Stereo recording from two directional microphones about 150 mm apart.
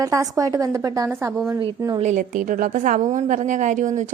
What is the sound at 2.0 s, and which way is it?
A woman's voice, 55° right (ahead or behind).